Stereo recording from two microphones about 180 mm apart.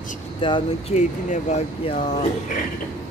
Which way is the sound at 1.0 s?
40° left (ahead or behind).